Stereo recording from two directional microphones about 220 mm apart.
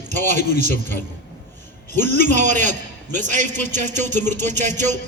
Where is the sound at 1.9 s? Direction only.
35° right (ahead or behind).